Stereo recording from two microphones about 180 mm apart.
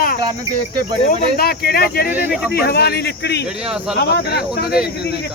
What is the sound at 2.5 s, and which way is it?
Speech, 60° left (ahead or behind).